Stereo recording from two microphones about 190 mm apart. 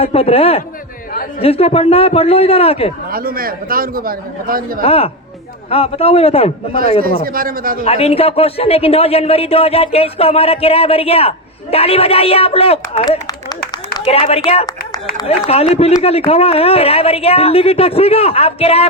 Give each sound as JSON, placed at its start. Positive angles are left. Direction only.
{"t": 0.0, "sound": "a man's voice", "side_deg": 30}
{"t": 3.1, "sound": "a man's voice", "side_deg": -50}
{"t": 4.8, "sound": "a man's voice", "side_deg": 30}
{"t": 7.0, "sound": "a man's voice", "side_deg": -50}
{"t": 7.9, "sound": "a man's voice", "side_deg": 30}